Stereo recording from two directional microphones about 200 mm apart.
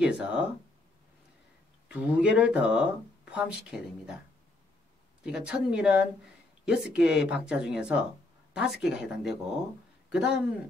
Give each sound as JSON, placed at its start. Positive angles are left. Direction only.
{"t": 0.0, "sound": "speech", "side_deg": -5}
{"t": 1.9, "sound": "speech", "side_deg": -5}
{"t": 5.2, "sound": "speech", "side_deg": -5}